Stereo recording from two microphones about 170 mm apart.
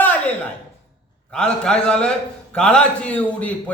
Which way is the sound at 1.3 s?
5° left (ahead or behind).